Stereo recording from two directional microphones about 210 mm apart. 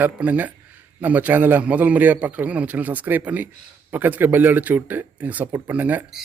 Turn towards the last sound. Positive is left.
turn(degrees=-10)  # may be behind; listen again after turning